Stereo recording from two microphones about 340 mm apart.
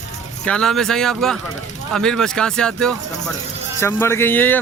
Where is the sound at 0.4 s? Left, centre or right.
Centre.